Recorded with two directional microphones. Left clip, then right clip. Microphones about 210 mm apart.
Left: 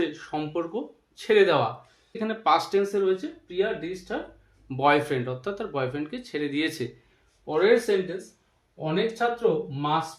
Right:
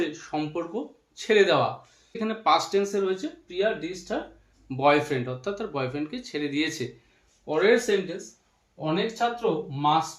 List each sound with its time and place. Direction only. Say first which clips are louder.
0.1 s speech: even; 20° left (ahead or behind)